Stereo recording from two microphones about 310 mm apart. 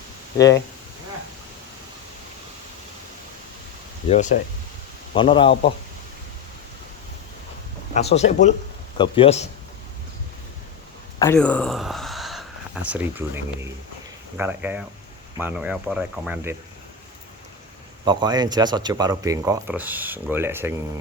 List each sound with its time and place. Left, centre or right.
0.3 s a man's voice: centre
4.1 s a man's voice: left
7.9 s a man's voice: left
11.2 s speech: centre
18.0 s speech: centre